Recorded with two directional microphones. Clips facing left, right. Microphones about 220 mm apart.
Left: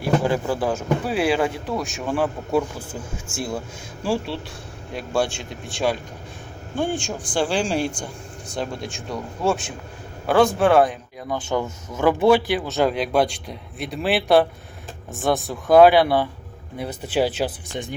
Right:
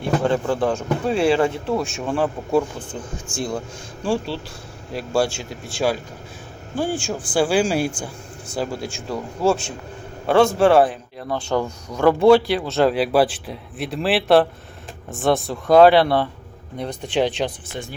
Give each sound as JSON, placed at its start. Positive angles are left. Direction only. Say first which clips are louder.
{"t": 0.0, "sound": "speech", "louder": "right 1 dB", "side_deg": 5}
{"t": 11.3, "sound": "a man's voice", "louder": "right 2 dB", "side_deg": 20}
{"t": 12.5, "sound": "speech", "louder": "right 3 dB", "side_deg": 0}